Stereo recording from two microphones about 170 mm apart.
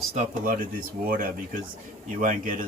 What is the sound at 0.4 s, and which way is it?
A man's voice, 55° right (ahead or behind).